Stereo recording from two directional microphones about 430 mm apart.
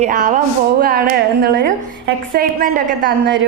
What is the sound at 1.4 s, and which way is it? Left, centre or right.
A woman's voice, right.